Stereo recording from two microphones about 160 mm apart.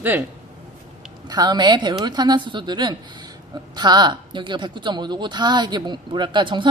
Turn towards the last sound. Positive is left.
turn(degrees=-30)  # may be behind; listen again after turning